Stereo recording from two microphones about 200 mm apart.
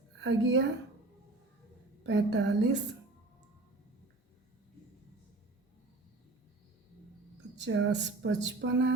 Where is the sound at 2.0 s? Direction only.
60° right (ahead or behind).